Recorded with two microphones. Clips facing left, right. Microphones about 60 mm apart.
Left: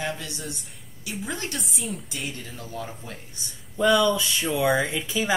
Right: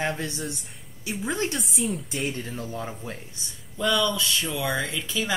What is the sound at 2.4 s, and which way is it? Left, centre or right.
Speech, right.